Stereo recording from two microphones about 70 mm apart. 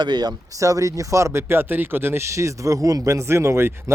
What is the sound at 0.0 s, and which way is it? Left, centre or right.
Speech, right.